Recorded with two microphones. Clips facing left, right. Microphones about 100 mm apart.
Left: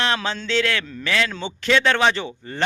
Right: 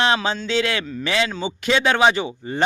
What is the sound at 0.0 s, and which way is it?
A man's voice, 15° right (ahead or behind).